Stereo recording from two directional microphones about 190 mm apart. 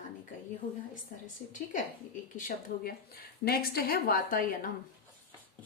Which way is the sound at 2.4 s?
45° left (ahead or behind).